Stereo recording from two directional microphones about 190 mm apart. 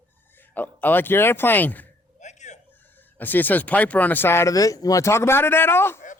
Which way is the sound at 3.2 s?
10° left (ahead or behind).